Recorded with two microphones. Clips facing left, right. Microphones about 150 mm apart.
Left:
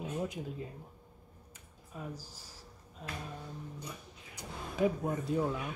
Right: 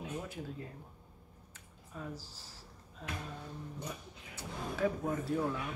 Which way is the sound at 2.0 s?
15° left (ahead or behind).